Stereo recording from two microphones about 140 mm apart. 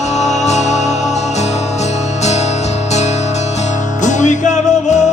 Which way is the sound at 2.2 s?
55° left (ahead or behind).